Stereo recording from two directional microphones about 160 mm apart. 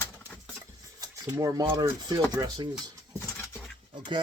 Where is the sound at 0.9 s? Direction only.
20° right (ahead or behind).